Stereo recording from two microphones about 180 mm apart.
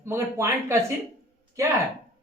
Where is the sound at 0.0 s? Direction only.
15° right (ahead or behind).